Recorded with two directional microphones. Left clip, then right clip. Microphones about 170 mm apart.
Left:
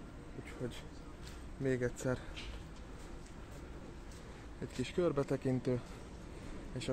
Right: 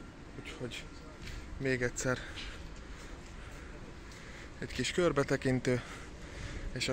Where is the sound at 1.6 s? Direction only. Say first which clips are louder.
Right 3 dB; 10° left (ahead or behind).